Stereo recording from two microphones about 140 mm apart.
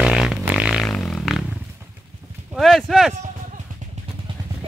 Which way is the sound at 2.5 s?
Centre (ahead or behind).